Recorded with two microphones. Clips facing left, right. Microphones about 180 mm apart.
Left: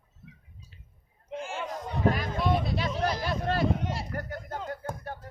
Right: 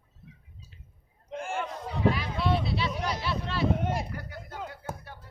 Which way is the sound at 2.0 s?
45° left (ahead or behind).